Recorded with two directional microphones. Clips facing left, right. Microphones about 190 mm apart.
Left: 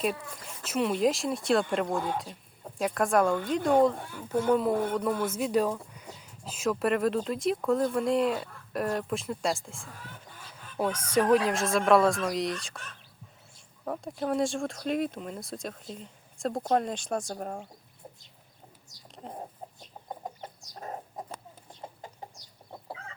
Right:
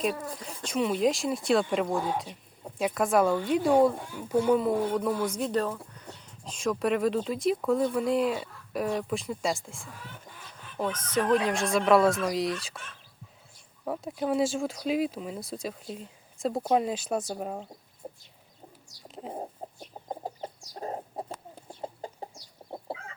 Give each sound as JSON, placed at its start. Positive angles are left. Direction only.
{"t": 0.4, "sound": "speech", "side_deg": 0}
{"t": 4.5, "sound": "speech", "side_deg": 0}
{"t": 13.8, "sound": "speech", "side_deg": -5}
{"t": 19.0, "sound": "chicken", "side_deg": -5}
{"t": 19.6, "sound": "chicken", "side_deg": -30}